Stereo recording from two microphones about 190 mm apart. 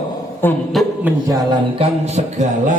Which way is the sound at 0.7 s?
Centre (ahead or behind).